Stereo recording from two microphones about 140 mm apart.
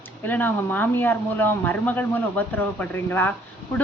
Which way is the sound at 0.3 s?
15° left (ahead or behind).